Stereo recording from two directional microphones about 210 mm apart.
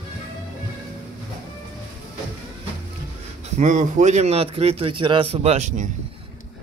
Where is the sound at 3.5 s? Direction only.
35° right (ahead or behind).